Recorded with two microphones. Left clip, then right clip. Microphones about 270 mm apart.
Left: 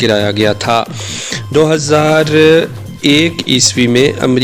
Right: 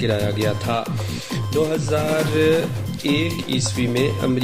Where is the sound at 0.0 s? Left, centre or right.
Left.